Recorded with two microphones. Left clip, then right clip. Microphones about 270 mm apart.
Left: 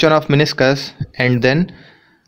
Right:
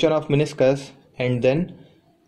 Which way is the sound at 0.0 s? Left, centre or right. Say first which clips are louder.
Left 7 dB; left.